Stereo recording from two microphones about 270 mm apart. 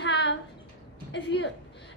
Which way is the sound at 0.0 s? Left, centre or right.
Left.